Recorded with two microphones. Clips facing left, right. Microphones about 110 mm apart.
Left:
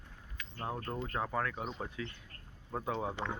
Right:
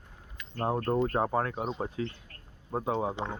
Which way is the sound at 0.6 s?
50° right (ahead or behind).